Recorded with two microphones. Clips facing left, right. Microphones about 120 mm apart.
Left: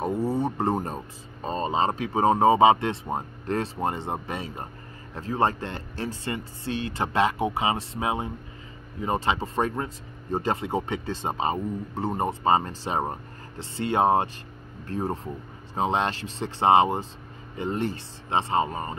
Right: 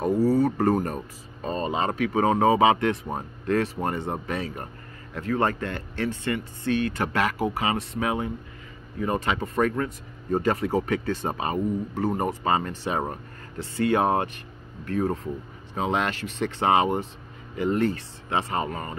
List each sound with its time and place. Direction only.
0.0 s speech: 25° left (ahead or behind)